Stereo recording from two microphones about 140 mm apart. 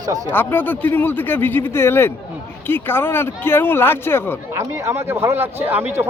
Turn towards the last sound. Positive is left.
turn(degrees=-15)  # may be behind; listen again after turning